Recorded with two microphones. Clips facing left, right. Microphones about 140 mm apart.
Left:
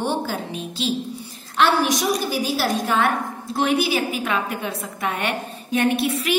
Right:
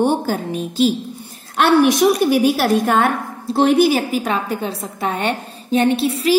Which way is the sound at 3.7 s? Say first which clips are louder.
Right 7 dB; 45° right (ahead or behind).